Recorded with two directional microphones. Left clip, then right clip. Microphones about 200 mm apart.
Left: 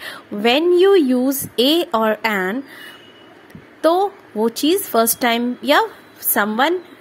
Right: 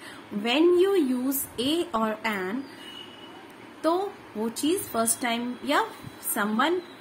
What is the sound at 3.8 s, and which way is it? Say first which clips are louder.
A woman's voice: left 10 dB; 45° left (ahead or behind).